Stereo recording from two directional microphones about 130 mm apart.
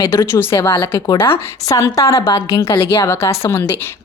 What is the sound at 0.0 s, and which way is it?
Speech, 35° left (ahead or behind).